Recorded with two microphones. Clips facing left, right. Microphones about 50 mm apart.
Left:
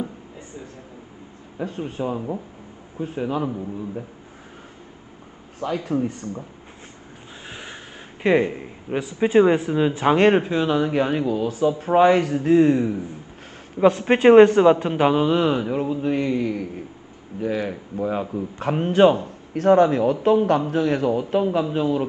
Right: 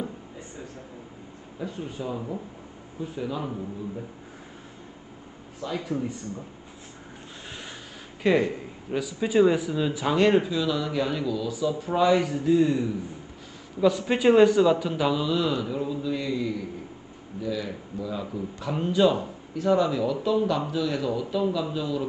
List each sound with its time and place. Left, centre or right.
1.6 s a man's voice: left
5.9 s speech: left
7.4 s a man's voice: left